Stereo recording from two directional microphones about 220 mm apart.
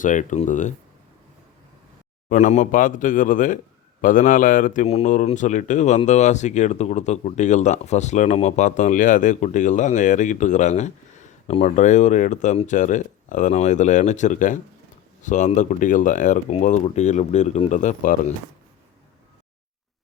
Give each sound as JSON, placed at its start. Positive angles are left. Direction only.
{"t": 0.0, "sound": "speech", "side_deg": 35}
{"t": 2.3, "sound": "speech", "side_deg": 35}